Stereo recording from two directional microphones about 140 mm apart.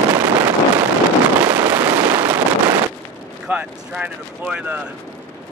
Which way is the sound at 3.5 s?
10° right (ahead or behind).